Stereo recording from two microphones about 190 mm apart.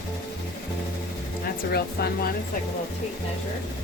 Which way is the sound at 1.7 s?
55° left (ahead or behind).